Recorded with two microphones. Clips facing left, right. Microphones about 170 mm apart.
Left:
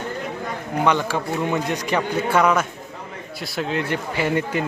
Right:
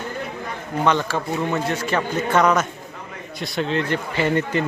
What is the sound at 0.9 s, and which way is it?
Speech, 10° left (ahead or behind).